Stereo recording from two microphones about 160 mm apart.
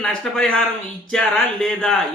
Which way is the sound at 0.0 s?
5° left (ahead or behind).